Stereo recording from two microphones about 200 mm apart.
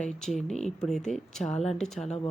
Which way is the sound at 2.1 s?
30° left (ahead or behind).